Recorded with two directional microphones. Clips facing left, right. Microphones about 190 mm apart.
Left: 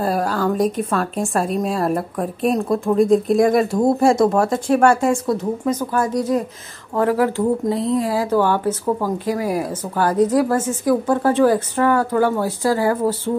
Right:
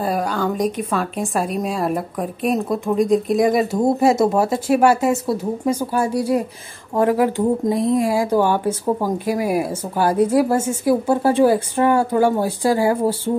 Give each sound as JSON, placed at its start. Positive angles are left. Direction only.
{"t": 0.0, "sound": "a woman's voice", "side_deg": 0}